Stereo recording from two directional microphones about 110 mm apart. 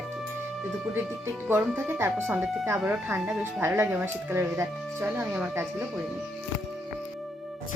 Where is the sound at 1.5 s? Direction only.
20° right (ahead or behind).